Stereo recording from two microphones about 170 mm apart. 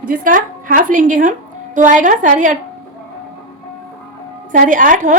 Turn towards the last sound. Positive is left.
turn(degrees=-50)  # may be behind; listen again after turning